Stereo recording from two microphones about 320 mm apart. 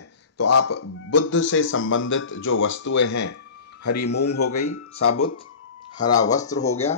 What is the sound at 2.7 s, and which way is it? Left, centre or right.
Speech, left.